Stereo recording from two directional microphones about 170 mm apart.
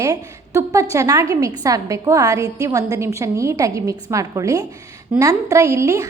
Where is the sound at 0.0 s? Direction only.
20° right (ahead or behind).